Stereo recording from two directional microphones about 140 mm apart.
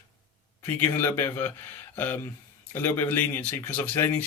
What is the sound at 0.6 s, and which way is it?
Speech, 15° left (ahead or behind).